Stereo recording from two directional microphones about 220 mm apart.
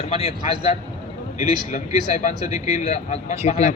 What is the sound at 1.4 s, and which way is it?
A man's voice, 30° left (ahead or behind).